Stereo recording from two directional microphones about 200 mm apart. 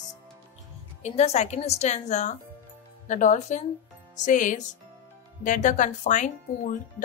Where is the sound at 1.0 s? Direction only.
35° left (ahead or behind).